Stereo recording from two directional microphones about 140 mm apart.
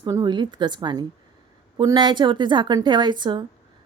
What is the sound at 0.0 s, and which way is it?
Speech, 30° right (ahead or behind).